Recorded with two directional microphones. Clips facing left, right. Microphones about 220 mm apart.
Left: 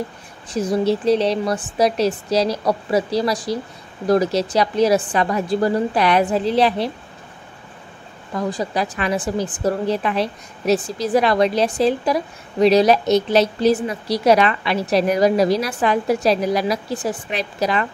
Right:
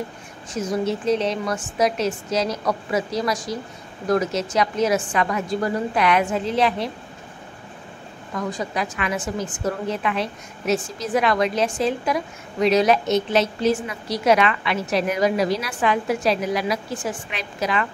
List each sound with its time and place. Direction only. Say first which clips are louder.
0.5 s a woman's voice: left 5 dB; 35° left (ahead or behind)
8.4 s a woman's voice: left 4 dB; 35° left (ahead or behind)